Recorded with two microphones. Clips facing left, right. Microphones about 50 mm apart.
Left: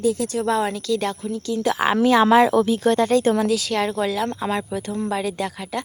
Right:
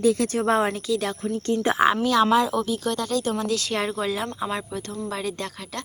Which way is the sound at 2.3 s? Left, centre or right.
Left.